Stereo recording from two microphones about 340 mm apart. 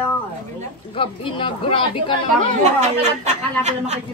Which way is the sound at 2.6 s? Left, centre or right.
Centre.